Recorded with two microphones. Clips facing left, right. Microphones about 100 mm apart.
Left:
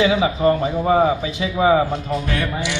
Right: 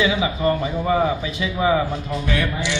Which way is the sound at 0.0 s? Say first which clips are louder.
Left 3 dB; 35° left (ahead or behind).